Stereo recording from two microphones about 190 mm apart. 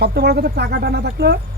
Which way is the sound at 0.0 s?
55° right (ahead or behind).